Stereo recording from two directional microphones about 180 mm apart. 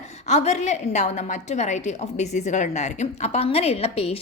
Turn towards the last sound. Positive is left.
turn(degrees=35)  # may be behind; listen again after turning